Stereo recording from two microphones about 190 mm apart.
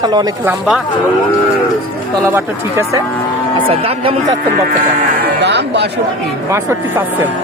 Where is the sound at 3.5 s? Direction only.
30° right (ahead or behind).